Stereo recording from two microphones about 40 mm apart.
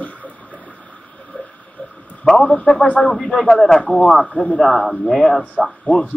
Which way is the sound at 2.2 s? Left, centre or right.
Left.